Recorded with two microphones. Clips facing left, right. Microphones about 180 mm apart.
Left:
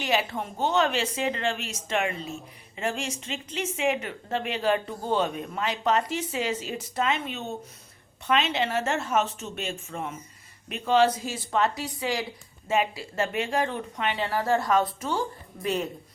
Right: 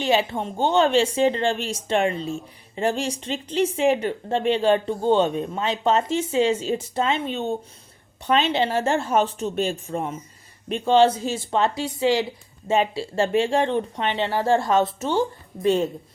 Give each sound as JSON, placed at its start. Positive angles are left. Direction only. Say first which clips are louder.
{"t": 0.0, "sound": "speech", "louder": "right 5 dB", "side_deg": -25}